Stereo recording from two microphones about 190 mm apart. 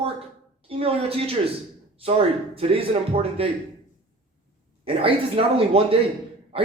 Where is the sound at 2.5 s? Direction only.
30° right (ahead or behind).